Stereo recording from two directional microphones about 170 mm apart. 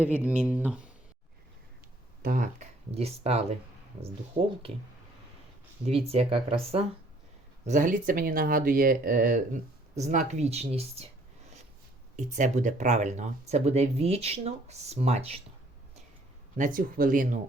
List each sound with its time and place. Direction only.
0.3 s speech: 10° right (ahead or behind)
2.2 s speech: 50° right (ahead or behind)
2.9 s speech: 35° right (ahead or behind)
5.8 s speech: 35° right (ahead or behind)
7.6 s speech: 50° right (ahead or behind)
12.1 s speech: 45° right (ahead or behind)
16.6 s speech: 55° right (ahead or behind)